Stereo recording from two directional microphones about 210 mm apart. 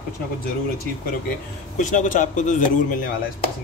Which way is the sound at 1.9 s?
35° left (ahead or behind).